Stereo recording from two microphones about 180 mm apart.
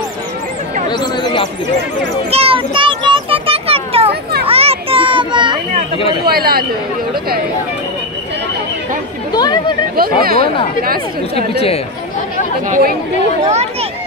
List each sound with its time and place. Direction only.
0.8 s speech: 25° left (ahead or behind)
2.3 s a sound: 30° right (ahead or behind)
4.1 s a sound: 60° right (ahead or behind)
4.5 s children playing: 35° right (ahead or behind)
6.2 s speech: 55° right (ahead or behind)
9.3 s speech: 20° left (ahead or behind)
10.2 s speech: 55° right (ahead or behind)
11.3 s speech: 35° left (ahead or behind)
12.6 s speech: 45° right (ahead or behind)